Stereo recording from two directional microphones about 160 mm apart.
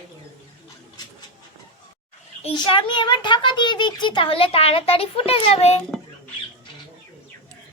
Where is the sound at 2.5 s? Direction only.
30° left (ahead or behind).